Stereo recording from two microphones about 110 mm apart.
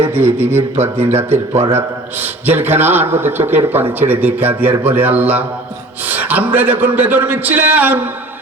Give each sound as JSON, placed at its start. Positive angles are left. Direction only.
{"t": 0.1, "sound": "a man's voice", "side_deg": -20}